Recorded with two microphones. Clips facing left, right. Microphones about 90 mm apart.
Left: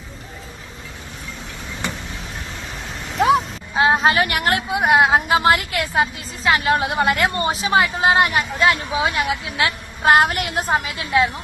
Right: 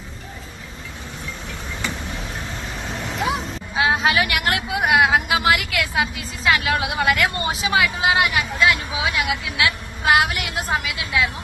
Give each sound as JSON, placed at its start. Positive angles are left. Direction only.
{"t": 3.8, "sound": "speech", "side_deg": 35}